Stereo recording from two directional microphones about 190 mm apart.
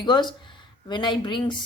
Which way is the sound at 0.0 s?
25° left (ahead or behind).